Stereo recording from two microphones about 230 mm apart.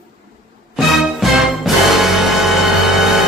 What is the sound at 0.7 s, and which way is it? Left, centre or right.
Music, centre.